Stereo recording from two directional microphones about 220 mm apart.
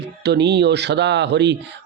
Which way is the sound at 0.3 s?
50° right (ahead or behind).